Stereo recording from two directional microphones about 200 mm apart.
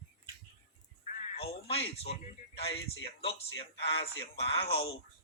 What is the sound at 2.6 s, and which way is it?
A man's voice, 30° left (ahead or behind).